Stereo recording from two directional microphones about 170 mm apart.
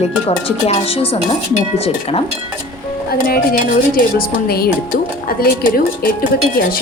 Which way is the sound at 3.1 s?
60° left (ahead or behind).